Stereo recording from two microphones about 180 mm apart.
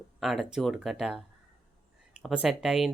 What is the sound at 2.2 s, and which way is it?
Speech, 5° right (ahead or behind).